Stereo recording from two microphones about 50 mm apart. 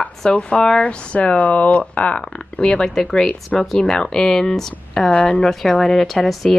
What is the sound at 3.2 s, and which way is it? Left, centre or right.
Speech, left.